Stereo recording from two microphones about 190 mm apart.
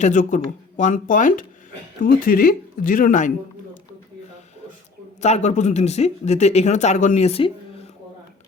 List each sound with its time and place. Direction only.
0.0 s speech: 40° left (ahead or behind)
5.2 s speech: 35° left (ahead or behind)